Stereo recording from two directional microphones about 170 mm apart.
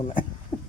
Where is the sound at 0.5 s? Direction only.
25° left (ahead or behind).